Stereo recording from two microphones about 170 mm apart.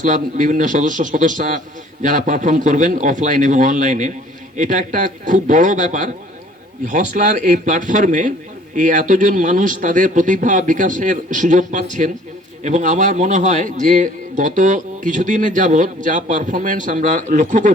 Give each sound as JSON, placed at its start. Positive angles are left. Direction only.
{"t": 0.0, "sound": "a man's voice", "side_deg": -50}